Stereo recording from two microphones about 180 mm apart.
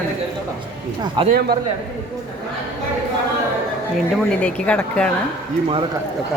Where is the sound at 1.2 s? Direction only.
25° right (ahead or behind).